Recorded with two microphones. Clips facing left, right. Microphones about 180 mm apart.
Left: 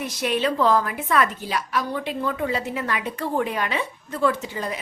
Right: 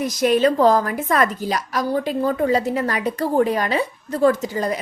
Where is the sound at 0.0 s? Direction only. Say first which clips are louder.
Right 7 dB; 40° right (ahead or behind).